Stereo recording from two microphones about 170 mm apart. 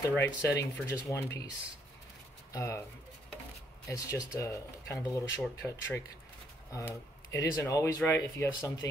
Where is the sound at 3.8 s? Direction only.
20° left (ahead or behind).